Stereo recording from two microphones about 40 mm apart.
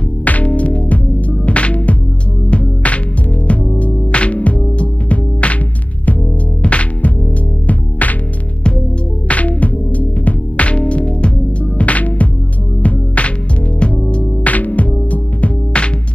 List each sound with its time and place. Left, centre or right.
0.2 s music: left
6.6 s music: left
9.3 s music: left
14.4 s music: left